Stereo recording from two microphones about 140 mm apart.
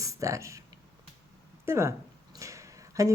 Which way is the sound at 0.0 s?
25° right (ahead or behind).